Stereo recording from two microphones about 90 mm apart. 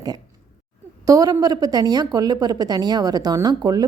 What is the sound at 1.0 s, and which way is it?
A woman's voice, 45° right (ahead or behind).